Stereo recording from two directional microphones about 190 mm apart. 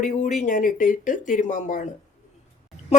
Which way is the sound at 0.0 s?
40° left (ahead or behind).